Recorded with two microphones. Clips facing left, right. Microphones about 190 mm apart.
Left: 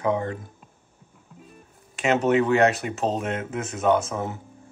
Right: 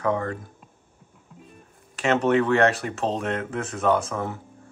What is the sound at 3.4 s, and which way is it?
Speech, 20° left (ahead or behind).